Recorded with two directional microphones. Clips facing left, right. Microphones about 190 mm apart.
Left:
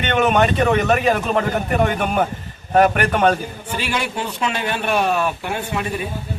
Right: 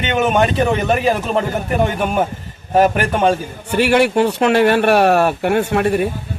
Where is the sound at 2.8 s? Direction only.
30° right (ahead or behind).